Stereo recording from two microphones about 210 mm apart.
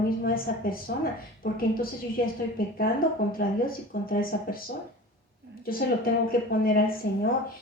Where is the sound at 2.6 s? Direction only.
45° left (ahead or behind).